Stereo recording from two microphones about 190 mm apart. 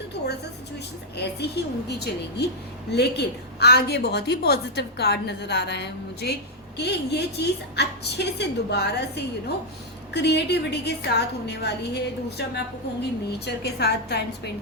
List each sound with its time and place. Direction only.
1.1 s a woman's voice: 60° left (ahead or behind)